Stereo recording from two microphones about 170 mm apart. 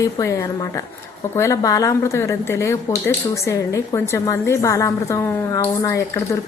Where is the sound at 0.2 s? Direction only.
20° left (ahead or behind).